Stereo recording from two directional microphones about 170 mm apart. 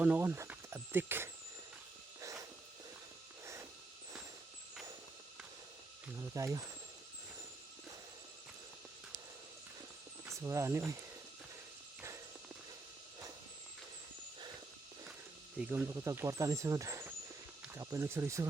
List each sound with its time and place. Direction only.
0.0 s speech: 10° right (ahead or behind)
2.2 s a sound: 20° right (ahead or behind)
3.4 s snort: 15° right (ahead or behind)
6.1 s speech: 20° right (ahead or behind)
10.2 s speech: 15° right (ahead or behind)
15.5 s speech: 10° right (ahead or behind)